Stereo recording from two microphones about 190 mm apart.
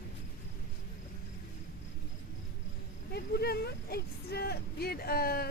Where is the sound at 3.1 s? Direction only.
55° left (ahead or behind).